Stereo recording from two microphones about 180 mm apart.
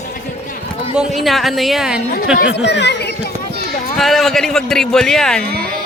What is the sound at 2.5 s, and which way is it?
Speech, 70° left (ahead or behind).